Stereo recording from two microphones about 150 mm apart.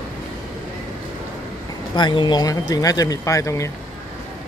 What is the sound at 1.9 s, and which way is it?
Speech, 30° left (ahead or behind).